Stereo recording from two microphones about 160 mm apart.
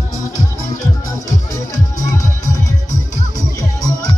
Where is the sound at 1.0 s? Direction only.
20° left (ahead or behind).